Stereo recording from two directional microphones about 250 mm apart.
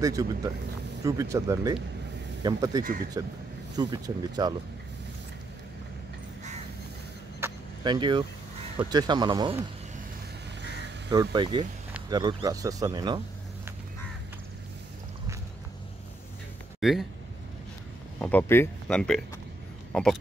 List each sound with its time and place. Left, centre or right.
0.0 s speech: centre
2.8 s speech: right
3.7 s speech: centre
7.3 s vehicle: centre
8.7 s speech: centre
11.3 s speech: centre
16.8 s speech: centre
18.2 s speech: centre